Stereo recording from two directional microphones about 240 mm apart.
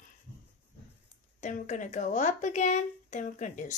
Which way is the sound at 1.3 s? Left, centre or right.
Left.